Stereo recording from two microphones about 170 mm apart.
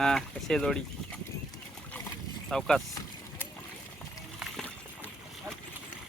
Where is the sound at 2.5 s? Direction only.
Centre (ahead or behind).